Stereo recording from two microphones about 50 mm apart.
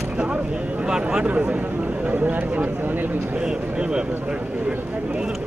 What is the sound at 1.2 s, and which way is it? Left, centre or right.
Speech, right.